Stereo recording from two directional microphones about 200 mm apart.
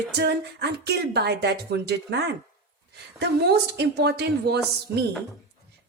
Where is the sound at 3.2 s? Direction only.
55° right (ahead or behind).